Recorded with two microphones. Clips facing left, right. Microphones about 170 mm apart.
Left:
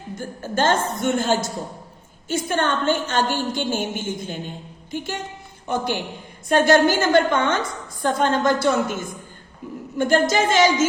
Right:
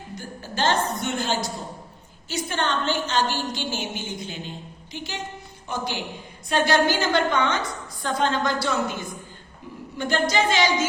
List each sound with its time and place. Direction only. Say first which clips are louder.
0.2 s a woman's voice: left 4 dB; 50° left (ahead or behind)